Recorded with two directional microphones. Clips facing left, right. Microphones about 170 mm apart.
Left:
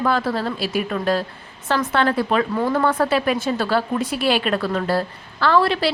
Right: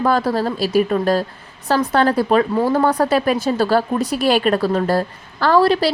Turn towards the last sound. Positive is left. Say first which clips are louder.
# right 4 dB
turn(degrees=-40)  # may be behind; listen again after turning